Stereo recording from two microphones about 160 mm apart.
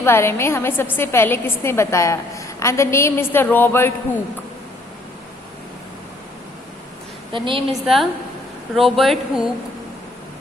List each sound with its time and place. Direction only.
0.0 s a woman's voice: 15° left (ahead or behind)
7.3 s a woman's voice: 30° right (ahead or behind)
7.7 s speech: centre (ahead or behind)